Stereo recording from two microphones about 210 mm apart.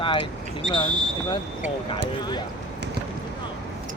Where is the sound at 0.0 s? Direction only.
25° left (ahead or behind).